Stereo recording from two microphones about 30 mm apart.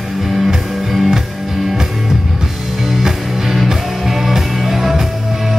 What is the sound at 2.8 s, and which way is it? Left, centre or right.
Music, centre.